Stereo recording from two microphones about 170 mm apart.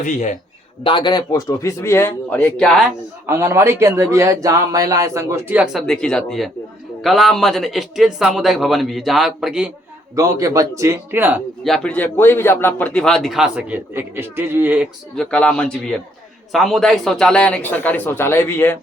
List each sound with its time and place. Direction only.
0.0 s a man's voice: 45° left (ahead or behind)
0.9 s speech: 30° left (ahead or behind); by 2.8 s 5° left (ahead or behind)
3.2 s a man's voice: 15° right (ahead or behind)
10.2 s a man's voice: 20° right (ahead or behind)
11.6 s a man's voice: 5° left (ahead or behind)
15.1 s a man's voice: 5° left (ahead or behind)